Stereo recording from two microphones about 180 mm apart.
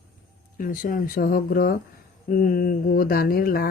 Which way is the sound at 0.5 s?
50° left (ahead or behind).